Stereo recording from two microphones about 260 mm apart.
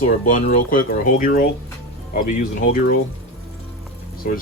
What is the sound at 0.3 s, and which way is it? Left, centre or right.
Speech, left.